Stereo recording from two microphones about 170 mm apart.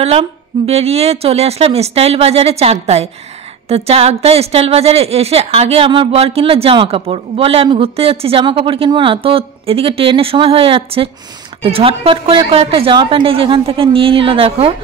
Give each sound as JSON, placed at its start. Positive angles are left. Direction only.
{"t": 0.0, "sound": "speech", "side_deg": -35}